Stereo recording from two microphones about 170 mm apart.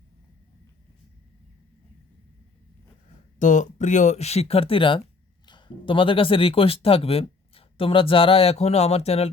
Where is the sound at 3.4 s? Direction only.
45° left (ahead or behind).